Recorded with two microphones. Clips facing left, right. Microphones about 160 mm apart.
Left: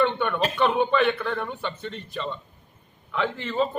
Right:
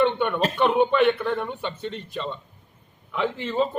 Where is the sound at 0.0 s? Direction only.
15° right (ahead or behind).